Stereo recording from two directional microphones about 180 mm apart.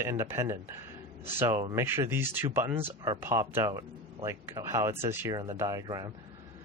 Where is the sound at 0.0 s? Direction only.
15° right (ahead or behind).